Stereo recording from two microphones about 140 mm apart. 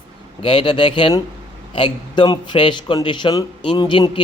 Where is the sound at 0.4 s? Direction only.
35° left (ahead or behind).